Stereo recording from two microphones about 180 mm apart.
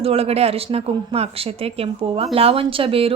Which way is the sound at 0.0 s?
35° right (ahead or behind).